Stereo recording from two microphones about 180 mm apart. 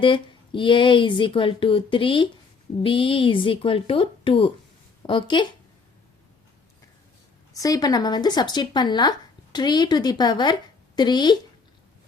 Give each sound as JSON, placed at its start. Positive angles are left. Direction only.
{"t": 0.0, "sound": "speech", "side_deg": 25}
{"t": 7.5, "sound": "speech", "side_deg": 20}